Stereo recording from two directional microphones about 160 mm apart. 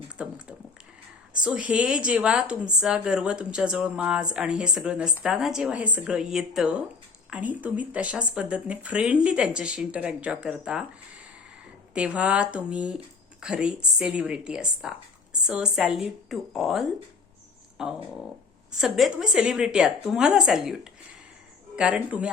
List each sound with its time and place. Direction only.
0.2 s a sound: 5° right (ahead or behind)
1.3 s a woman's voice: 5° right (ahead or behind)
11.9 s a woman's voice: 10° right (ahead or behind)